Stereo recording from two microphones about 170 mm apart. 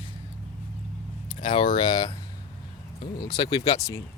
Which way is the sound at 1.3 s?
30° left (ahead or behind).